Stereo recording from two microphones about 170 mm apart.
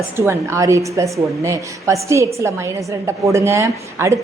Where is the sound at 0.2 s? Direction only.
15° right (ahead or behind).